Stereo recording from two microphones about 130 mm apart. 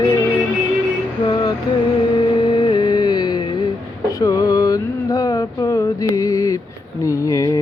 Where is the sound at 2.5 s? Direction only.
35° left (ahead or behind).